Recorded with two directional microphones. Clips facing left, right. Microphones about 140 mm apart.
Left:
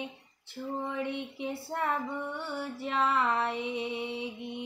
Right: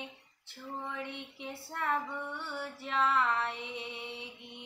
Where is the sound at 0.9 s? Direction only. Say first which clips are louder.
Left 7 dB; 10° left (ahead or behind).